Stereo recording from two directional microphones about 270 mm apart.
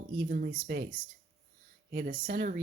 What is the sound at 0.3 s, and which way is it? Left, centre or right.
Speech, right.